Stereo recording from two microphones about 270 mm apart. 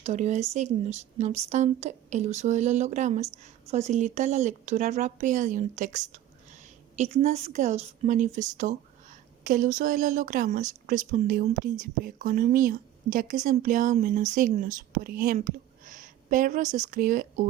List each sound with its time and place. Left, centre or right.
0.0 s speech: right